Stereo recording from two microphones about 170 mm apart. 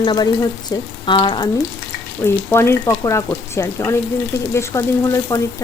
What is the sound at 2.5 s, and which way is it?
Speech, 15° left (ahead or behind).